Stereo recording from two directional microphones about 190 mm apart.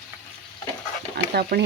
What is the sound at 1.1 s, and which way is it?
Pant, 55° right (ahead or behind).